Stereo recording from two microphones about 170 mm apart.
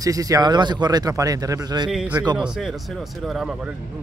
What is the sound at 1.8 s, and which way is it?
Speech, 5° right (ahead or behind).